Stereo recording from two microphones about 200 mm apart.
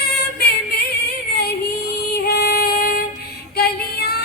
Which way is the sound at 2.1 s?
55° left (ahead or behind).